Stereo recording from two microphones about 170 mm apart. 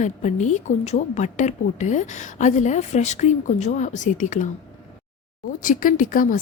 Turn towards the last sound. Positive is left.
turn(degrees=55)  # may be behind; listen again after turning